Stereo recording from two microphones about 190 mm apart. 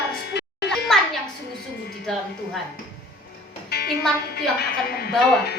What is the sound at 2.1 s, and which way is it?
Speech, centre (ahead or behind).